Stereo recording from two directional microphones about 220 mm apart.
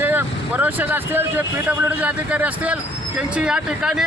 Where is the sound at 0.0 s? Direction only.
10° right (ahead or behind).